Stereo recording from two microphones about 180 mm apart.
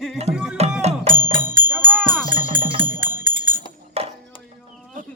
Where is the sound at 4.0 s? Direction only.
35° right (ahead or behind).